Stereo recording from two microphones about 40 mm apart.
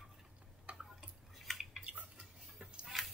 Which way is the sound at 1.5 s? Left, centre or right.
Centre.